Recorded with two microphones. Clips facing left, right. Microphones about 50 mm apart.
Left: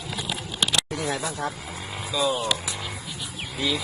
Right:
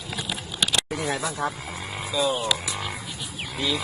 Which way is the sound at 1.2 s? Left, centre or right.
Right.